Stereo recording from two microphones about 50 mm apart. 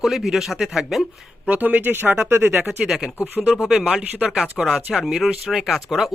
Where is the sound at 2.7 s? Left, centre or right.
Centre.